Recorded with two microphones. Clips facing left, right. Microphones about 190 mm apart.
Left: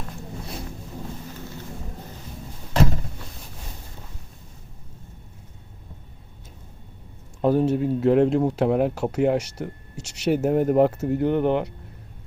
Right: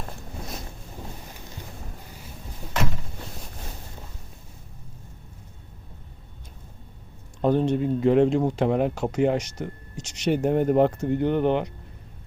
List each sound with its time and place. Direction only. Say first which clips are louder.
7.4 s speech: left 1 dB; 5° left (ahead or behind)